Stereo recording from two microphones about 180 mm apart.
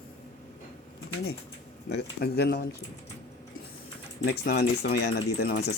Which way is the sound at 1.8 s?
65° left (ahead or behind).